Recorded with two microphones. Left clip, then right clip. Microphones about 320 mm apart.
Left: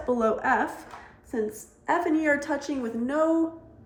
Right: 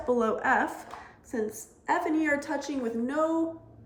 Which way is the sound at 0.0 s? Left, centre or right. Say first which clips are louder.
Left 2 dB; centre.